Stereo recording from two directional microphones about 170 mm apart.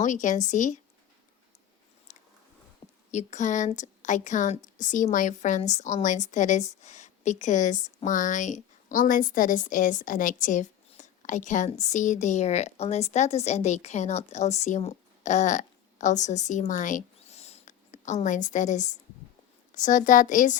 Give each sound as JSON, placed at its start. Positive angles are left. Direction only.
{"t": 0.0, "sound": "a woman's voice", "side_deg": 45}
{"t": 2.1, "sound": "a sound", "side_deg": 45}
{"t": 2.8, "sound": "a woman's voice", "side_deg": 45}